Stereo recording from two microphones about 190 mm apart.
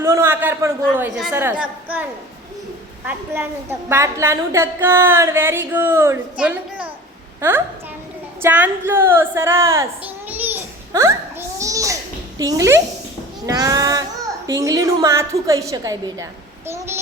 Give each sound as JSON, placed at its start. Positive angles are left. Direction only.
{"t": 0.0, "sound": "a woman's voice", "side_deg": -15}
{"t": 3.1, "sound": "a woman's voice", "side_deg": -10}
{"t": 8.4, "sound": "a woman's voice", "side_deg": -10}
{"t": 10.2, "sound": "babbling", "side_deg": -10}
{"t": 12.4, "sound": "a woman's voice", "side_deg": -15}